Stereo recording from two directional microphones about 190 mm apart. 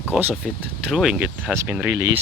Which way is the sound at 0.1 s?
10° right (ahead or behind).